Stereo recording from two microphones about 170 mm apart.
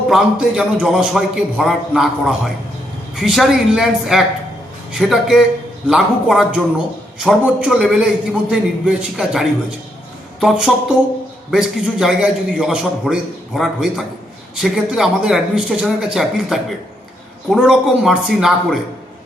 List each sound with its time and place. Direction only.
0.1 s a man's voice: 5° right (ahead or behind)